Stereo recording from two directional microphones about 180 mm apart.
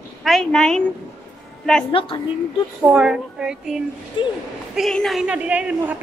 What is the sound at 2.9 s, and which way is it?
Speech, 5° right (ahead or behind).